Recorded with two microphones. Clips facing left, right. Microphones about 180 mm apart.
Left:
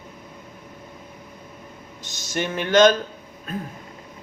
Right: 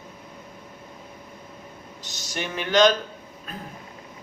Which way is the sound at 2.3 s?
45° left (ahead or behind).